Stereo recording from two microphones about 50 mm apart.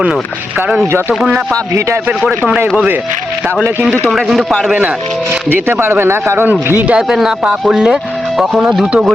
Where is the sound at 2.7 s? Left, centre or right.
Right.